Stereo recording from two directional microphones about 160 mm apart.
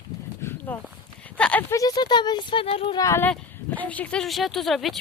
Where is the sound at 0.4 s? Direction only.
15° left (ahead or behind).